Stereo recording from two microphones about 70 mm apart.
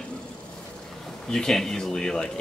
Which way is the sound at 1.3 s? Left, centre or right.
Centre.